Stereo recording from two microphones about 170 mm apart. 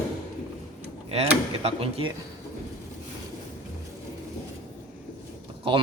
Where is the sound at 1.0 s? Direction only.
35° right (ahead or behind).